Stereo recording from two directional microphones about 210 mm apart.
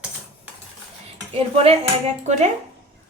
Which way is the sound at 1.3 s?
30° right (ahead or behind).